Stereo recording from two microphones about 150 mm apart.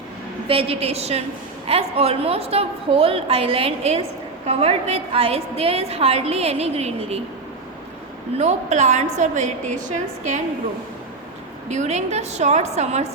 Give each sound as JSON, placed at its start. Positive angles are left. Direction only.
{"t": 0.4, "sound": "a woman's voice", "side_deg": -40}
{"t": 8.4, "sound": "a woman's voice", "side_deg": -50}
{"t": 11.7, "sound": "a woman's voice", "side_deg": -50}